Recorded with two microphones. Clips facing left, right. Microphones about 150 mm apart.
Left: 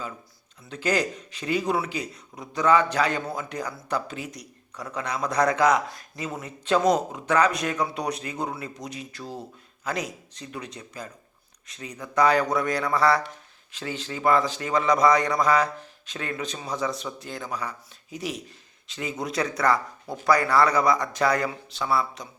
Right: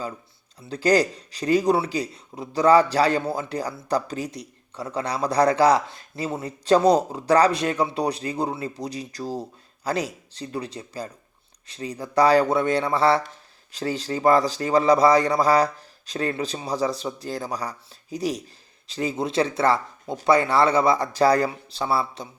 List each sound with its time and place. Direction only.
0.6 s speech: 35° right (ahead or behind)